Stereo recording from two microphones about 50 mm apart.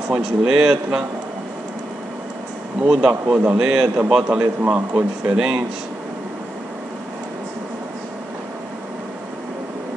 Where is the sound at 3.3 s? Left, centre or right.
Centre.